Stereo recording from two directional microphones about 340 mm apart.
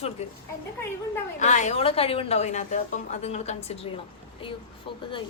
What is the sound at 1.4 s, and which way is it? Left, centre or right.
A woman's voice, left.